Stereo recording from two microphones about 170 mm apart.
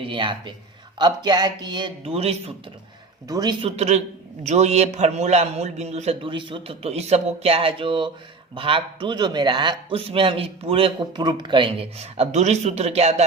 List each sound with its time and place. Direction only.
0.0 s speech: 30° right (ahead or behind)
3.2 s a man's voice: 25° right (ahead or behind); by 13.2 s 40° right (ahead or behind)